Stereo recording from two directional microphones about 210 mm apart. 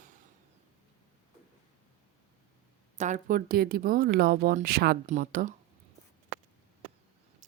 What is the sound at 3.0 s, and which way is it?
A woman's voice, 40° right (ahead or behind).